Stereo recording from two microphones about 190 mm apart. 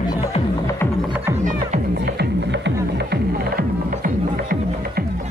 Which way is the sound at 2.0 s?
60° right (ahead or behind).